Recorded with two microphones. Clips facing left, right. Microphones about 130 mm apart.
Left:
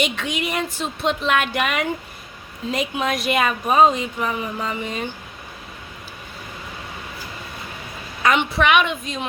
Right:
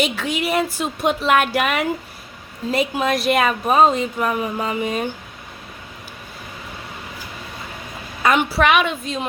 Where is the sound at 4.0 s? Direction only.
45° right (ahead or behind).